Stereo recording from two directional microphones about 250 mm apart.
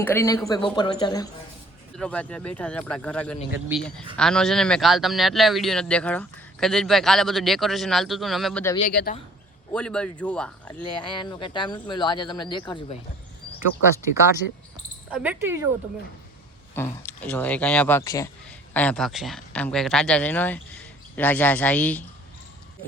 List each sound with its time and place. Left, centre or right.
0.0 s speech: centre
2.0 s speech: centre
8.8 s a man's voice: left
9.7 s speech: centre
11.2 s speech: centre
15.1 s speech: centre
16.7 s speech: centre